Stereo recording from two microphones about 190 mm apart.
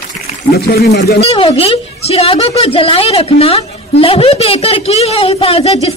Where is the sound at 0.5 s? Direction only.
55° left (ahead or behind).